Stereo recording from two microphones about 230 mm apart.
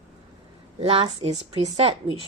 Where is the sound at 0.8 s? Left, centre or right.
Right.